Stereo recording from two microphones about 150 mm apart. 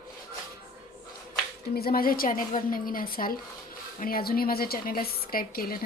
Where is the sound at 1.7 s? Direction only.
85° left.